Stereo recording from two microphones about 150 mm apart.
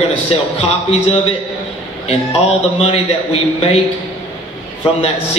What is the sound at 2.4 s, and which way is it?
A man's voice, 40° left (ahead or behind).